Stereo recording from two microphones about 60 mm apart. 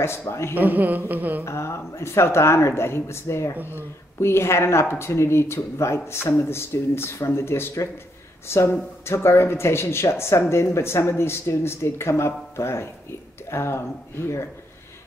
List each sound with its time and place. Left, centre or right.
0.0 s speech: left
0.6 s a sound: right
1.4 s speech: left